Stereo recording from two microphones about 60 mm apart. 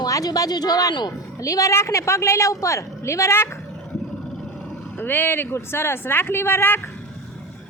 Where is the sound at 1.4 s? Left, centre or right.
Left.